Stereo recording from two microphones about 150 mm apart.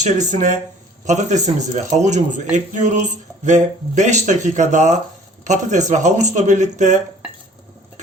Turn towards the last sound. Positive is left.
turn(degrees=-55)  # may be behind; listen again after turning